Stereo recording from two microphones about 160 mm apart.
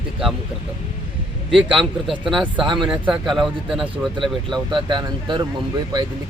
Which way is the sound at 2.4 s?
30° right (ahead or behind).